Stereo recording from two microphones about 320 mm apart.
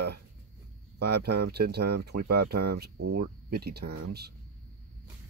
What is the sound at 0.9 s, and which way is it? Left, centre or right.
Speech, right.